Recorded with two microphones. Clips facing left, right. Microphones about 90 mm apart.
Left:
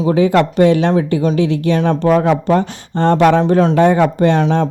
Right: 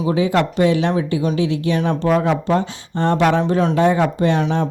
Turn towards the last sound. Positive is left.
turn(degrees=60)  # may be behind; listen again after turning